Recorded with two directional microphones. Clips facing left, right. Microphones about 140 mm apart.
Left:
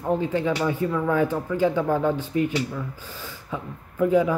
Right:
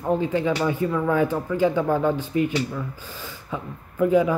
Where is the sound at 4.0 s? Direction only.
15° right (ahead or behind).